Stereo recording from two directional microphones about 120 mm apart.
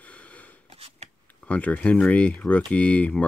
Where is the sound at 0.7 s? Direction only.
55° right (ahead or behind).